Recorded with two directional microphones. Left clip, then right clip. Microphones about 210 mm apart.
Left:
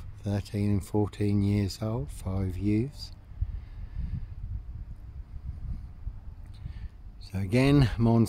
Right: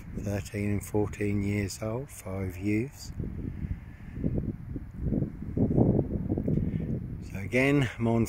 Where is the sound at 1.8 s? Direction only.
10° left (ahead or behind).